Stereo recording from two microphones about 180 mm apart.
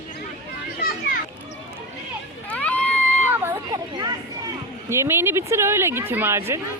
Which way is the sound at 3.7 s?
20° right (ahead or behind).